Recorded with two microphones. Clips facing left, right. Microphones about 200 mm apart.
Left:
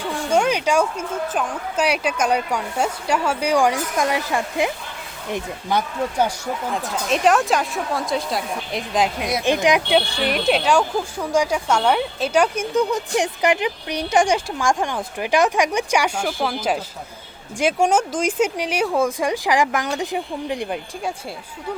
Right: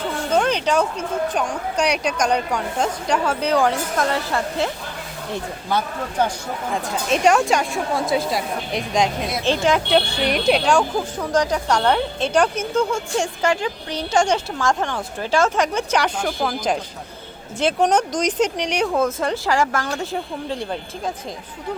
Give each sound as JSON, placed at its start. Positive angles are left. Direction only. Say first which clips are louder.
{"t": 0.3, "sound": "speech", "louder": "left 1 dB", "side_deg": 10}
{"t": 6.7, "sound": "a woman's voice", "louder": "right 2 dB", "side_deg": 0}
{"t": 9.4, "sound": "speech", "louder": "left 1 dB", "side_deg": 15}
{"t": 9.9, "sound": "speech", "louder": "right 1 dB", "side_deg": 0}